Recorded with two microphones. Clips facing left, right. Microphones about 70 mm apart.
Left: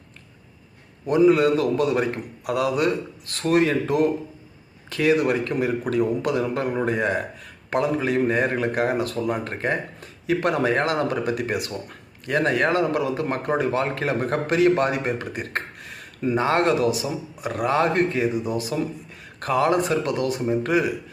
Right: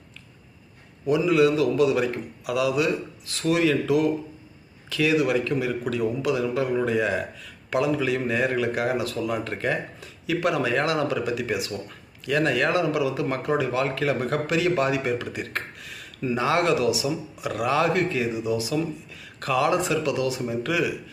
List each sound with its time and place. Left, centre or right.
1.0 s a man's voice: left